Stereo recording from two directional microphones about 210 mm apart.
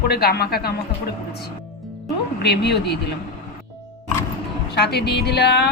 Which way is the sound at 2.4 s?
50° left (ahead or behind).